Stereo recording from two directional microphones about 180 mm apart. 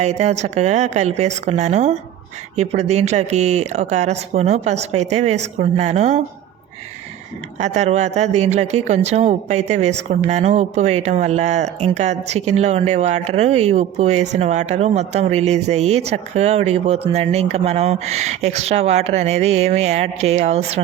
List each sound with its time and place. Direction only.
0.0 s speech: 40° right (ahead or behind)
7.6 s speech: 40° right (ahead or behind)